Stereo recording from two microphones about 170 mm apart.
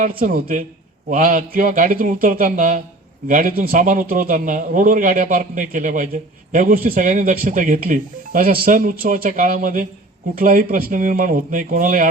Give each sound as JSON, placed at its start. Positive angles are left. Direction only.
{"t": 0.0, "sound": "a man's voice", "side_deg": -60}